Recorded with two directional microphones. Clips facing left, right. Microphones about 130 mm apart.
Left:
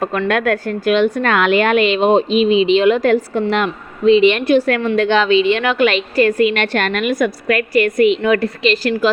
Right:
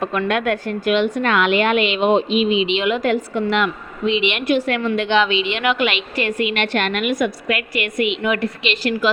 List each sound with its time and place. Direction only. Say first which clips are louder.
0.3 s a woman's voice: left 3 dB; 40° left (ahead or behind)